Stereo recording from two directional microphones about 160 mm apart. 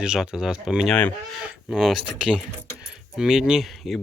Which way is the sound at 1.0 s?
10° left (ahead or behind).